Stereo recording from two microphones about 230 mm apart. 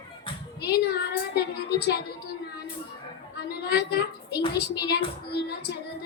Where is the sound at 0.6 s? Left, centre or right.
Left.